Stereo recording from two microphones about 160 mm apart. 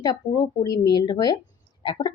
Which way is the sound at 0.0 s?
25° left (ahead or behind).